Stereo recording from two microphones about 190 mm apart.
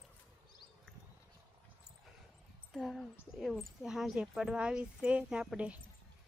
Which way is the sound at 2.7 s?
Centre (ahead or behind).